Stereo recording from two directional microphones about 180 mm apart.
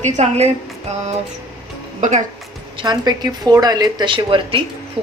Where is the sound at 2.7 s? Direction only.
25° right (ahead or behind).